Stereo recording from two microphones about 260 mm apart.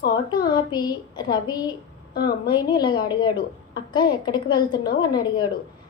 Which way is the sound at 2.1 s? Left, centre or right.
Left.